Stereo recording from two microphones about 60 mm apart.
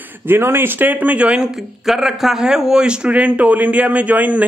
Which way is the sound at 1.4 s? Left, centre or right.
Centre.